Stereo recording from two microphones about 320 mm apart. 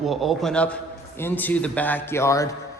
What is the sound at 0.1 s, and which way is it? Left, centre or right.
A man's voice, centre.